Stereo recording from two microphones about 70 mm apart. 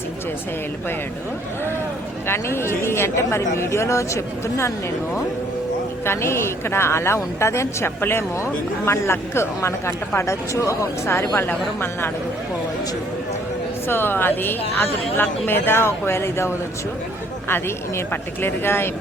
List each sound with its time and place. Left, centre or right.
2.2 s speech: left
6.1 s speech: left
13.8 s speech: left